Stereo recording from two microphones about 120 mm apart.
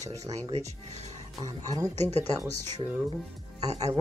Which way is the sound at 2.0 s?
65° right (ahead or behind).